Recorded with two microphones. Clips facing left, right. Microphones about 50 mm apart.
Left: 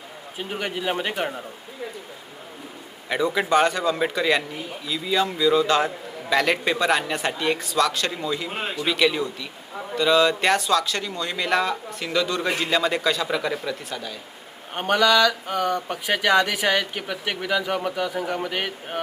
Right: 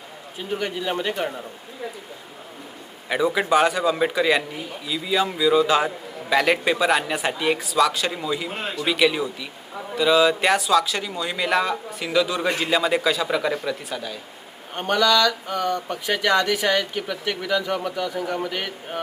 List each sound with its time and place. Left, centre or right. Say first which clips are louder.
0.3 s speech: right 2 dB; centre
3.1 s speech: right 1 dB; centre
8.4 s speech: even; centre
8.8 s speech: right 1 dB; centre
14.7 s speech: left 1 dB; centre